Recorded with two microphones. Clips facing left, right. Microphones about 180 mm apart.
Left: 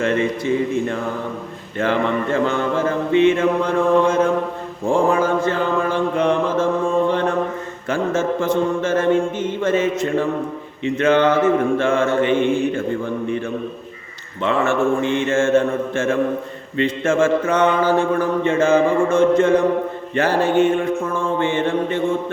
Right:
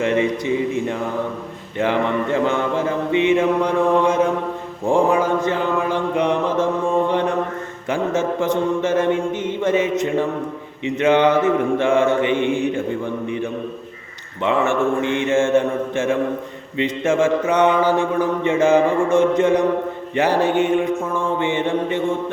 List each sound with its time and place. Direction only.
0.0 s mantra: 15° right (ahead or behind)